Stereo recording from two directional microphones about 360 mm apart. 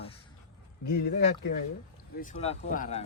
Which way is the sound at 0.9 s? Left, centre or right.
Left.